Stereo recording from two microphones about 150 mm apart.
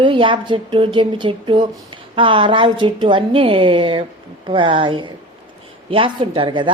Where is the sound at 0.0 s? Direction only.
35° right (ahead or behind).